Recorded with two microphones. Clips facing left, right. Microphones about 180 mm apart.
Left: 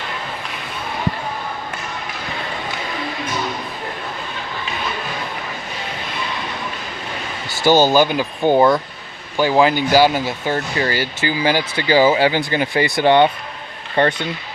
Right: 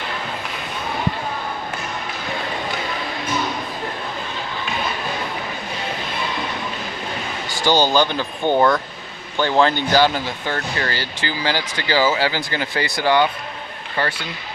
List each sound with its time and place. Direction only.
7.7 s speech: 45° left (ahead or behind)
7.9 s speech: 10° left (ahead or behind)